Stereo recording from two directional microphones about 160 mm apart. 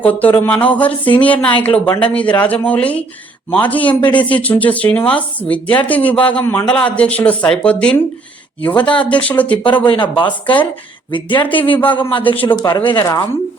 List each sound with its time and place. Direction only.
0.0 s speech: 10° left (ahead or behind)
9.7 s speech: 30° left (ahead or behind)